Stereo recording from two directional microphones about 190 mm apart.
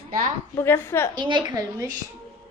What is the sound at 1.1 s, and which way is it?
Speech, 25° right (ahead or behind).